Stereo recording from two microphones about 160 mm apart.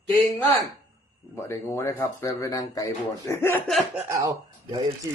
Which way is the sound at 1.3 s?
15° left (ahead or behind).